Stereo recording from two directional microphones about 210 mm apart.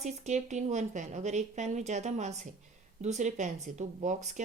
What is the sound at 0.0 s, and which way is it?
Speech, 35° right (ahead or behind).